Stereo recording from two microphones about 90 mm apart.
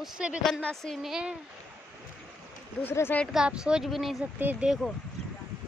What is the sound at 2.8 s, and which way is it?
Speech, 25° left (ahead or behind).